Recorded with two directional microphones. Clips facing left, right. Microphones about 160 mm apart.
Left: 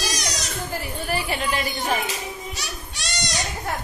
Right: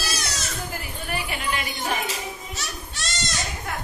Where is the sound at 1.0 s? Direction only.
35° left (ahead or behind).